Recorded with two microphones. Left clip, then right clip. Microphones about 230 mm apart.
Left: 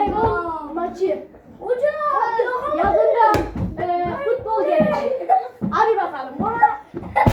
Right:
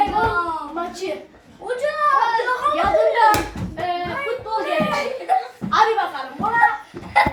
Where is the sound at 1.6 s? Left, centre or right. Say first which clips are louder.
Even; right.